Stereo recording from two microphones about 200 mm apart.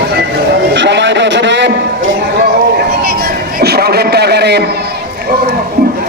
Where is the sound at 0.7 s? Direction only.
60° right (ahead or behind).